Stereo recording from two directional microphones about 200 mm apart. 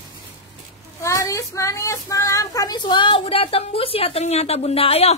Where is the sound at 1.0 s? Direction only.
15° left (ahead or behind).